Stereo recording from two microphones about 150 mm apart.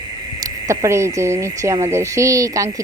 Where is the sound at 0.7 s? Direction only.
20° right (ahead or behind).